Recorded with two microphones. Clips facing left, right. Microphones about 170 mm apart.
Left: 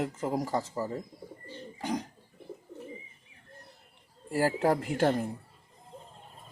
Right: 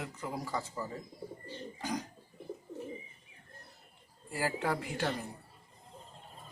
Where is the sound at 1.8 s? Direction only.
25° left (ahead or behind).